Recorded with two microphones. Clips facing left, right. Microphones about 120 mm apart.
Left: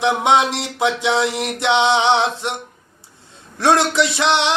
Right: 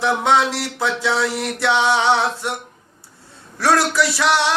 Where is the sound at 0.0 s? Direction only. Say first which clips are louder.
Left 1 dB; 20° left (ahead or behind).